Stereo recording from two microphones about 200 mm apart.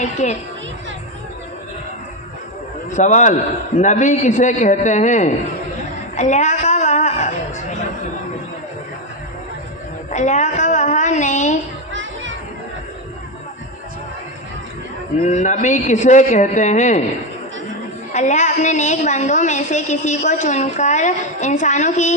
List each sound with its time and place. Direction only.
0.0 s a woman's voice: 35° left (ahead or behind)
2.9 s a woman's voice: 35° left (ahead or behind)
6.1 s a sound: 35° left (ahead or behind)
10.1 s a sound: 35° left (ahead or behind)
15.2 s a woman's voice: 35° left (ahead or behind)
18.1 s a woman's voice: 35° left (ahead or behind)